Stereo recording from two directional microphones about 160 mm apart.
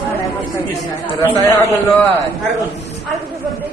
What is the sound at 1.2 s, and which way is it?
Speech, 20° left (ahead or behind).